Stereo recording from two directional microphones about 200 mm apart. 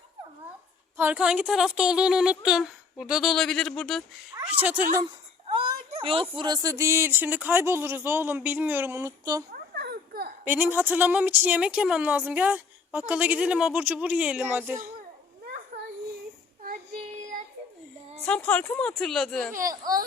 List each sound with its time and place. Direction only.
0.9 s speech: 5° right (ahead or behind)
4.6 s a woman's voice: 10° right (ahead or behind)
5.5 s a woman's voice: 25° right (ahead or behind)
9.5 s a sound: 55° right (ahead or behind)
10.4 s a woman's voice: 10° right (ahead or behind)
18.3 s speech: 5° left (ahead or behind)
19.5 s a child's voice: 15° right (ahead or behind)